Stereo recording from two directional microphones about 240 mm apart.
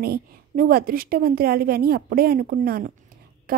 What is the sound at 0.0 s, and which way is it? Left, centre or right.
A woman's voice, right.